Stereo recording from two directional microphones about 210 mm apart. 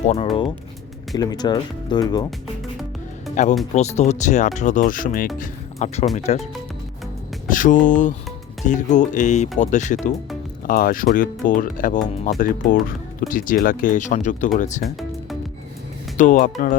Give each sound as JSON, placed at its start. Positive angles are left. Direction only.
{"t": 0.0, "sound": "speech", "side_deg": 30}
{"t": 1.1, "sound": "speech", "side_deg": 20}
{"t": 3.4, "sound": "speech", "side_deg": 35}
{"t": 7.4, "sound": "speech", "side_deg": 40}
{"t": 16.1, "sound": "speech", "side_deg": 35}